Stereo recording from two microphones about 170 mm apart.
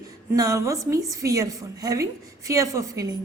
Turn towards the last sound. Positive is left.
turn(degrees=-20)  # may be behind; listen again after turning